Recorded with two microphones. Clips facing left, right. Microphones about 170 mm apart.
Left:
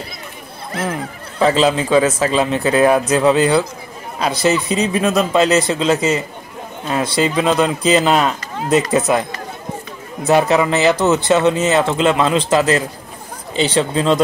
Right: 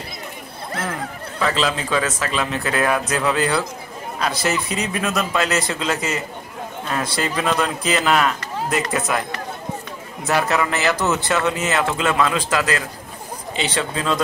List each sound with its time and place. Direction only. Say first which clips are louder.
1.4 s speech: left 7 dB; 25° left (ahead or behind)
10.2 s speech: left 6 dB; 20° left (ahead or behind)